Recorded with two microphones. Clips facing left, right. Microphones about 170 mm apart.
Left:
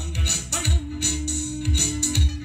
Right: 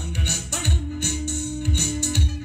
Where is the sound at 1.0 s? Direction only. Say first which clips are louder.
Left 1 dB; 50° right (ahead or behind).